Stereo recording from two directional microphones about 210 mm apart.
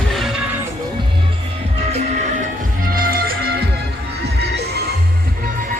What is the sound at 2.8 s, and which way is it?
Music, 45° right (ahead or behind).